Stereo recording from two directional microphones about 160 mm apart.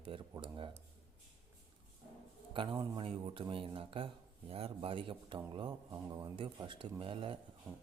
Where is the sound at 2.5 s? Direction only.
30° right (ahead or behind).